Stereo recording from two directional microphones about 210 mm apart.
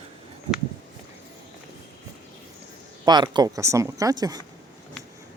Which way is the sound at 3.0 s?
20° right (ahead or behind).